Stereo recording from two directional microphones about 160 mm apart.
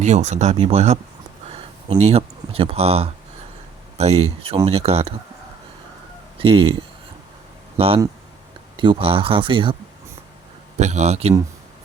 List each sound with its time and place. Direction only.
0.0 s speech: 45° right (ahead or behind)
6.4 s speech: 35° right (ahead or behind)
7.8 s speech: 35° right (ahead or behind)
10.8 s speech: 45° right (ahead or behind)